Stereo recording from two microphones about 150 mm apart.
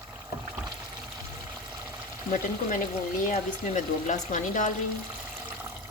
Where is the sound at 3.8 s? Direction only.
55° left (ahead or behind).